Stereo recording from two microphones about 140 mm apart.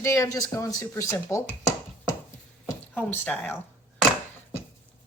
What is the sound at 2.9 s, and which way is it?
Speech, 15° left (ahead or behind).